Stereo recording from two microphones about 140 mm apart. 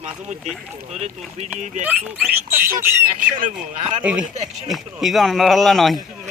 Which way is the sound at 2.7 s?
10° right (ahead or behind).